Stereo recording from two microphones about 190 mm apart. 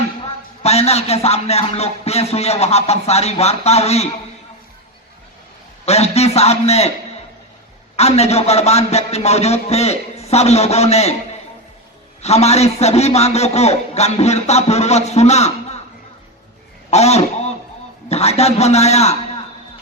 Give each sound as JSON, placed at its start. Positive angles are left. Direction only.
{"t": 0.6, "sound": "a man's voice", "side_deg": 35}
{"t": 5.8, "sound": "a man's voice", "side_deg": 35}
{"t": 7.9, "sound": "a man's voice", "side_deg": 35}
{"t": 12.2, "sound": "a man's voice", "side_deg": 35}
{"t": 16.9, "sound": "a man's voice", "side_deg": 35}